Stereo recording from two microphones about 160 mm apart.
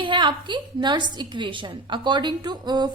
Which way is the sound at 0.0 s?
30° right (ahead or behind).